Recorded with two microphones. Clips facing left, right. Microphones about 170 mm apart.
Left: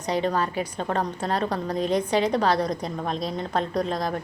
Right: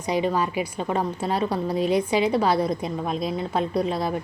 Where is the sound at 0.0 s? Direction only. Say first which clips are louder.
Right 1 dB; 10° right (ahead or behind).